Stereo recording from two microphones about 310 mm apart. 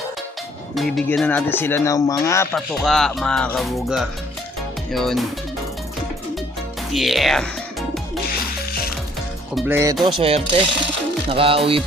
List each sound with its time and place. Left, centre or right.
0.8 s speech: centre
6.9 s music: centre
9.6 s music: centre
10.2 s speech: centre
11.3 s music: centre